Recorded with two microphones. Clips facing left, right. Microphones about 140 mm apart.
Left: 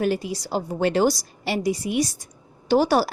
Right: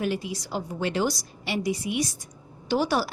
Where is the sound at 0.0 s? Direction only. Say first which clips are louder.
Left 5 dB; 40° left (ahead or behind).